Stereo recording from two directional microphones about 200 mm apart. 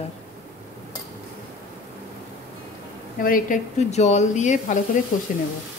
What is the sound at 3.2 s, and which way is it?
Speech, 45° left (ahead or behind).